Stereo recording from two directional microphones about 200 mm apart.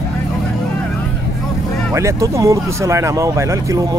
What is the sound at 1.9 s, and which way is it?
Speech, 15° right (ahead or behind).